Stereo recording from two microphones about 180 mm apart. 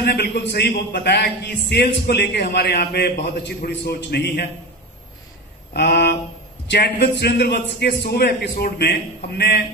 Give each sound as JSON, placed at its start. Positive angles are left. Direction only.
{"t": 0.0, "sound": "a man's voice", "side_deg": 65}
{"t": 5.7, "sound": "a man's voice", "side_deg": 65}